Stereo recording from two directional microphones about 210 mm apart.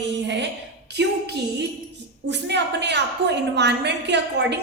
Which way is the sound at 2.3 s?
55° right (ahead or behind).